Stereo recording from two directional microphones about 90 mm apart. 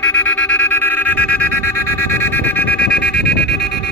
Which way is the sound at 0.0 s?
15° left (ahead or behind).